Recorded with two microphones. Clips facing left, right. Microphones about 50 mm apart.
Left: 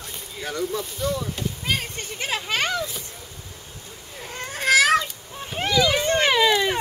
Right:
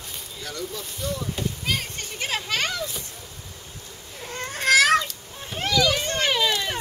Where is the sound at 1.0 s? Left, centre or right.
Centre.